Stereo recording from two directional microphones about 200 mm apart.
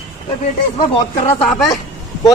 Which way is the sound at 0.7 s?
30° left (ahead or behind).